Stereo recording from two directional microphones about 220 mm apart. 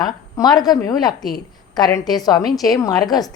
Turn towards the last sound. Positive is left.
turn(degrees=15)  # may be behind; listen again after turning